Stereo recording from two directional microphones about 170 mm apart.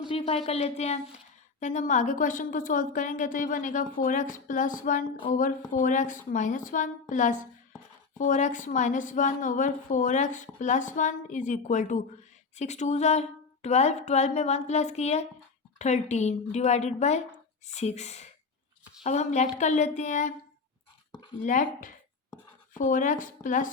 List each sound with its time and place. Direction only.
0.1 s a woman's voice: 35° left (ahead or behind)
21.1 s a sound: 25° left (ahead or behind)
21.4 s a woman's voice: 50° left (ahead or behind)